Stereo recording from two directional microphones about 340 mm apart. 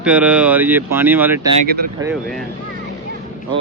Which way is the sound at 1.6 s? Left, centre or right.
Right.